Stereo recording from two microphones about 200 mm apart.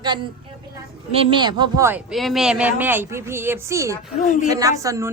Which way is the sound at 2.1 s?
Centre (ahead or behind).